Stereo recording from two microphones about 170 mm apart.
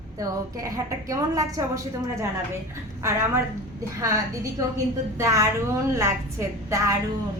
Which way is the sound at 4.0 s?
20° right (ahead or behind).